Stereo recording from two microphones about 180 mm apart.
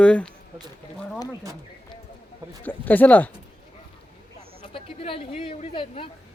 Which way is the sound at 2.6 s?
10° left (ahead or behind).